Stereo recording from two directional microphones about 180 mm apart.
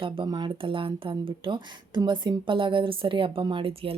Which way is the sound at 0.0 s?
25° right (ahead or behind).